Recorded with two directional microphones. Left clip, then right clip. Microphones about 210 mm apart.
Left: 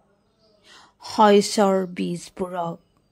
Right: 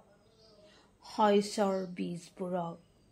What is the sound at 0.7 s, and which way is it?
Speech, 40° left (ahead or behind).